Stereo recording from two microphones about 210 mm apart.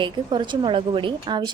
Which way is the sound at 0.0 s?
20° right (ahead or behind).